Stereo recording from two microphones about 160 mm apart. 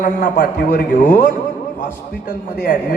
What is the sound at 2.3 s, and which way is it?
Speech, 60° left (ahead or behind).